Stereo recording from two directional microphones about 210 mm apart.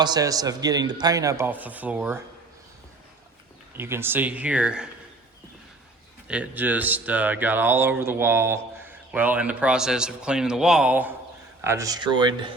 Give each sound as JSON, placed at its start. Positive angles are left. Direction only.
{"t": 0.0, "sound": "speech", "side_deg": -20}
{"t": 3.8, "sound": "speech", "side_deg": -10}
{"t": 6.2, "sound": "speech", "side_deg": -5}